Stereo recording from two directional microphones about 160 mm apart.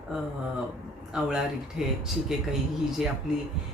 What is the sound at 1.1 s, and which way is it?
Speech, 5° right (ahead or behind).